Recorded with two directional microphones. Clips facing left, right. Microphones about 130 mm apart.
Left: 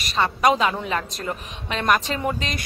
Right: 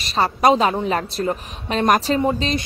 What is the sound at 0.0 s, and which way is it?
Speech, 30° right (ahead or behind).